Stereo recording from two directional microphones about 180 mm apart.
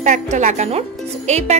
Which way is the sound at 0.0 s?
45° right (ahead or behind).